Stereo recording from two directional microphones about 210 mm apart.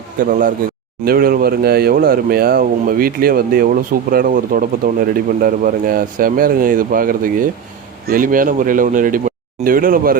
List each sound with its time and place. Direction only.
0.2 s speech: 40° right (ahead or behind)